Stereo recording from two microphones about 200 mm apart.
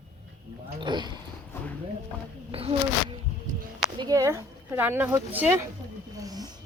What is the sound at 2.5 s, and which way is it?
Insect, 30° right (ahead or behind).